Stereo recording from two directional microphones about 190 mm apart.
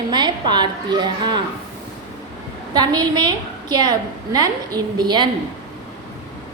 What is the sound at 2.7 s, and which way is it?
A woman's voice, 20° right (ahead or behind).